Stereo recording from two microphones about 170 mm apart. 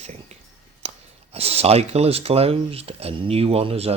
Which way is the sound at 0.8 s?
35° right (ahead or behind).